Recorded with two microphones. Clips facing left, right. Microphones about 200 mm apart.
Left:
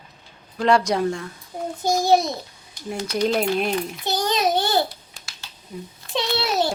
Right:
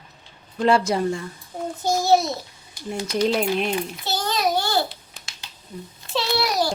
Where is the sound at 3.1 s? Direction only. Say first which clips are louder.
Even; centre (ahead or behind).